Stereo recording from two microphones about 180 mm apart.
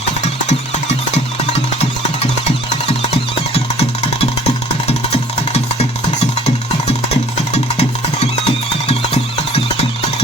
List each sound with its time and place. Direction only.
0.4 s music: 40° left (ahead or behind)
3.5 s music: 35° left (ahead or behind)
6.1 s music: 35° left (ahead or behind)